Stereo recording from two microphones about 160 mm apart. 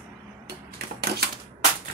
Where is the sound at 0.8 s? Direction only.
90° right.